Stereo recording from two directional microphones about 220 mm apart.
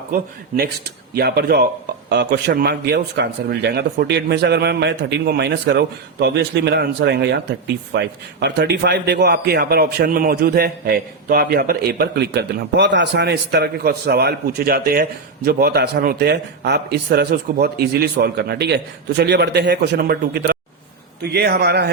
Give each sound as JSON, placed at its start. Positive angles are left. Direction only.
{"t": 0.1, "sound": "speech", "side_deg": -45}